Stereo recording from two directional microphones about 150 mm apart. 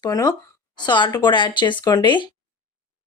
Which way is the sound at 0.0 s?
25° left (ahead or behind).